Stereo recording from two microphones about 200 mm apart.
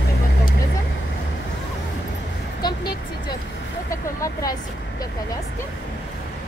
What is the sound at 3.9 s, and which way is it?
Vehicle, 15° left (ahead or behind).